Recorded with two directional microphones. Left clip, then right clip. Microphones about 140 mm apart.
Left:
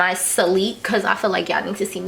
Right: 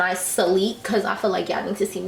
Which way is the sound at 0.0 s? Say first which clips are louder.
Left 3 dB; 30° left (ahead or behind).